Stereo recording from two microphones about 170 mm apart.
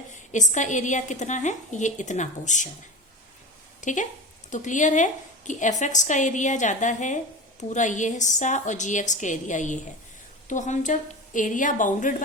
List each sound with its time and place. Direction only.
0.1 s a woman's voice: 45° left (ahead or behind)
3.8 s a woman's voice: 45° left (ahead or behind)